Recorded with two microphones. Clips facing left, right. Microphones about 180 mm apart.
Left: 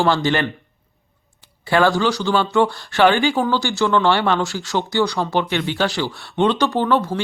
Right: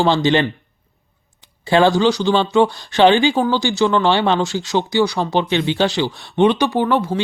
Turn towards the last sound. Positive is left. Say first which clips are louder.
# right 1 dB
turn(degrees=-15)  # may be behind; listen again after turning